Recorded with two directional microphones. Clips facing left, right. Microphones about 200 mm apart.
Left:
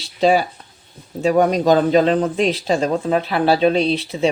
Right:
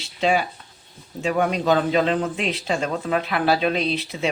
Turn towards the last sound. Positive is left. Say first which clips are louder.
# left 6 dB
turn(degrees=30)  # may be behind; listen again after turning